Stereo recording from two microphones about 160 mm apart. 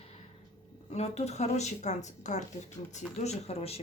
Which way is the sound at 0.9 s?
40° left (ahead or behind).